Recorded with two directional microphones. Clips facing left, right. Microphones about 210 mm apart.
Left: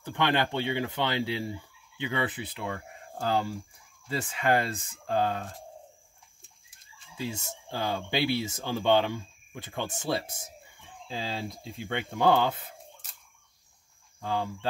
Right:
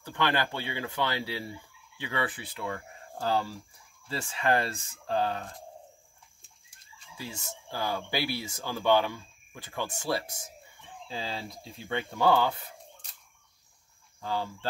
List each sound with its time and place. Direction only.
0.0 s speech: 20° left (ahead or behind)
7.2 s speech: 25° left (ahead or behind)
11.9 s speech: 20° left (ahead or behind)
14.2 s speech: 20° left (ahead or behind)